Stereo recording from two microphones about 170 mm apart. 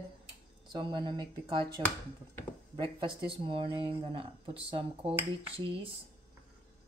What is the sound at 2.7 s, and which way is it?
Speech, 30° right (ahead or behind).